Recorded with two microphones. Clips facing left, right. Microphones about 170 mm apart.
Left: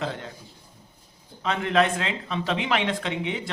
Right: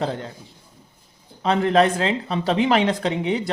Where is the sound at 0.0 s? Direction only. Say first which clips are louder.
Right 5 dB; 35° right (ahead or behind).